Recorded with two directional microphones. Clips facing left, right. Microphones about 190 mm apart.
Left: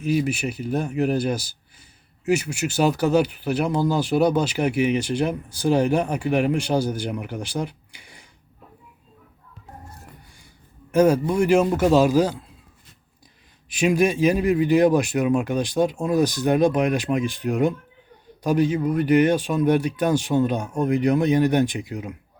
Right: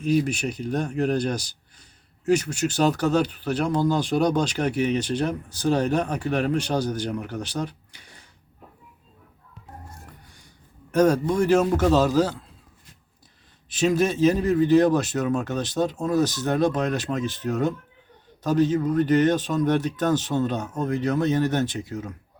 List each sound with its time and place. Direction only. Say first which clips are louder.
0.0 s speech: even; 5° left (ahead or behind)
10.9 s speech: left 2 dB; 10° left (ahead or behind)
13.7 s speech: left 2 dB; 15° left (ahead or behind)